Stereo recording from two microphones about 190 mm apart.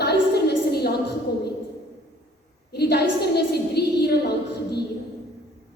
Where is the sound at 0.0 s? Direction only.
60° left (ahead or behind).